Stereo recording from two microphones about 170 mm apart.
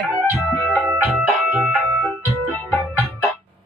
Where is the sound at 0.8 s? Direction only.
Centre (ahead or behind).